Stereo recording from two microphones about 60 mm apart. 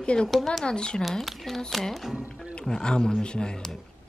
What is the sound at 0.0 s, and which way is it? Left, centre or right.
Speech, centre.